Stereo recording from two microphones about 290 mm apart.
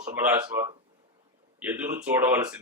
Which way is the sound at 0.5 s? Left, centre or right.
Centre.